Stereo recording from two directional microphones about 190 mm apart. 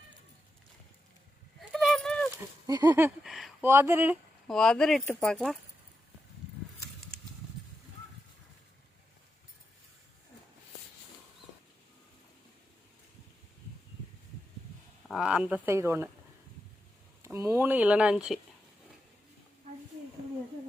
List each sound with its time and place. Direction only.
1.7 s clip-clop: centre (ahead or behind)
2.6 s a sound: 20° right (ahead or behind)
3.2 s speech: centre (ahead or behind)
3.7 s speech: 15° right (ahead or behind)
4.4 s speech: 5° left (ahead or behind)
15.0 s speech: centre (ahead or behind)
17.2 s speech: 15° right (ahead or behind)